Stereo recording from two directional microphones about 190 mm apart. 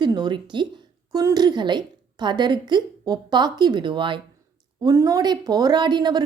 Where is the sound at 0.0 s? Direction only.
25° right (ahead or behind).